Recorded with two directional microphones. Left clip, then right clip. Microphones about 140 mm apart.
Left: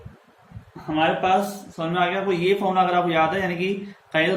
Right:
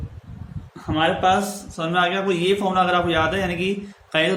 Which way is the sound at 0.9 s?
40° right (ahead or behind).